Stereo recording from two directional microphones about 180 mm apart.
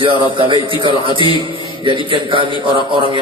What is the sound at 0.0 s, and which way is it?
A man's voice, 30° right (ahead or behind).